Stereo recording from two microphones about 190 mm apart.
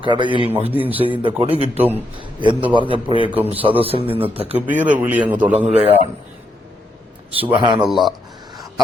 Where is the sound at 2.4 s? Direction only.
25° right (ahead or behind).